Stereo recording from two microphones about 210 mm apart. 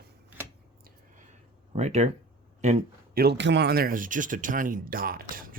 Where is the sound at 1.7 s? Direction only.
30° right (ahead or behind).